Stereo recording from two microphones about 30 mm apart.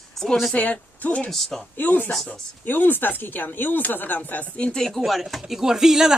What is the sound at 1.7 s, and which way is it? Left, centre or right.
Speech, left.